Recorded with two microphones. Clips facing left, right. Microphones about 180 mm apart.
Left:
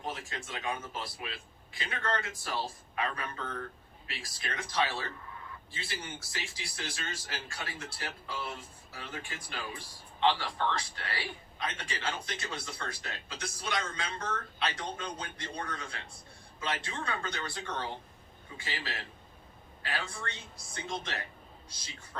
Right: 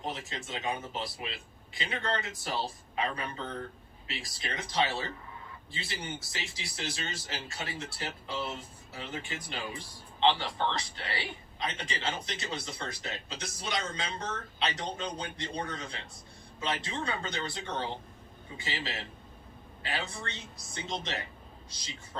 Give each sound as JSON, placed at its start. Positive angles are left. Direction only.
{"t": 0.0, "sound": "speech", "side_deg": -20}